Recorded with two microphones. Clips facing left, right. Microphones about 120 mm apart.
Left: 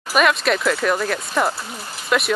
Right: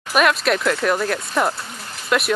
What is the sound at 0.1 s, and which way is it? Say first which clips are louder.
Speech: even; centre (ahead or behind).